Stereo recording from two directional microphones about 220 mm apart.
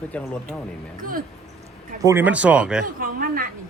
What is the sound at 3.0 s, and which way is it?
Speech, 40° right (ahead or behind).